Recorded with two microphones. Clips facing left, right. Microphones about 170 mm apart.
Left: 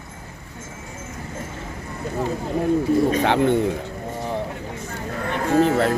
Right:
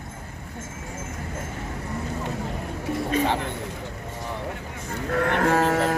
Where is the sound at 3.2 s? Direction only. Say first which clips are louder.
Left 7 dB; 70° left (ahead or behind).